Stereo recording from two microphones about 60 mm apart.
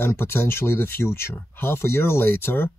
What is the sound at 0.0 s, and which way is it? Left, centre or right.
Speech, left.